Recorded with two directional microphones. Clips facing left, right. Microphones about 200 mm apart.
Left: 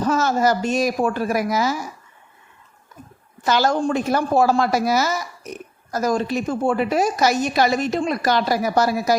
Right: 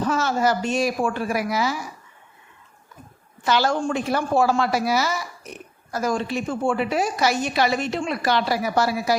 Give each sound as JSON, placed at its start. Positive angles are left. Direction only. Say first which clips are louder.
{"t": 0.0, "sound": "a woman's voice", "louder": "left 3 dB", "side_deg": 40}
{"t": 3.4, "sound": "speech", "louder": "left 2 dB", "side_deg": 45}